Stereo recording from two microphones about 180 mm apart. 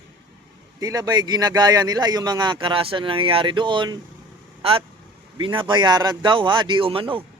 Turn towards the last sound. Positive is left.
turn(degrees=-30)  # may be behind; listen again after turning